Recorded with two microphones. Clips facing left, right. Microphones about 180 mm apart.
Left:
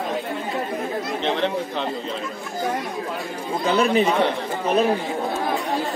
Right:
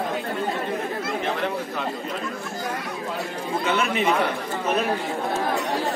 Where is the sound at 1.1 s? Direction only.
25° left (ahead or behind).